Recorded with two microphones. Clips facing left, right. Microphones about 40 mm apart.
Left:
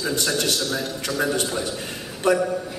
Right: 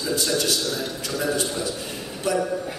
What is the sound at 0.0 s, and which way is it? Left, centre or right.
A man's voice, left.